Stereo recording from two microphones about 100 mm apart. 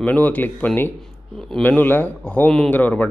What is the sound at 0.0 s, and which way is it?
A man's voice, 15° left (ahead or behind).